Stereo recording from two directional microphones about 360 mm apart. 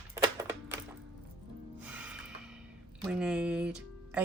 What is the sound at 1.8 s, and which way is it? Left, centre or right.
Music, centre.